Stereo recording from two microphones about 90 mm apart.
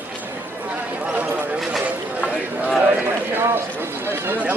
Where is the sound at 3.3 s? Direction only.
25° right (ahead or behind).